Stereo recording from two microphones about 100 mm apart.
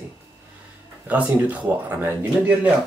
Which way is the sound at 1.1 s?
15° right (ahead or behind).